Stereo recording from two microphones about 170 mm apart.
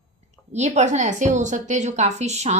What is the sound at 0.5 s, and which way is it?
A woman's voice, 45° right (ahead or behind).